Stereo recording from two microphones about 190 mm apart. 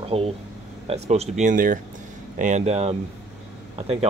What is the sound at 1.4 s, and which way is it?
Speech, 45° right (ahead or behind).